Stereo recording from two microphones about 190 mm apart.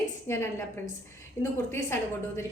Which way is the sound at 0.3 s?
15° left (ahead or behind).